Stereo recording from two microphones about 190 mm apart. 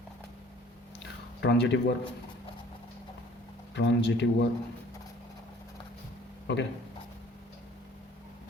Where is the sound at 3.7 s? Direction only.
65° left (ahead or behind).